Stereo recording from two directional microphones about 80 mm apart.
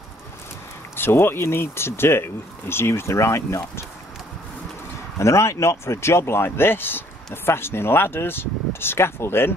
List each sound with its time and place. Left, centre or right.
0.9 s speech: left
5.2 s speech: left